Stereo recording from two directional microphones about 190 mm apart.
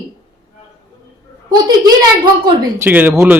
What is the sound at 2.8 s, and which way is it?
Speech, 10° right (ahead or behind).